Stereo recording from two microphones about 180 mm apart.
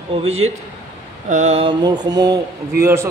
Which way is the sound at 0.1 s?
30° right (ahead or behind).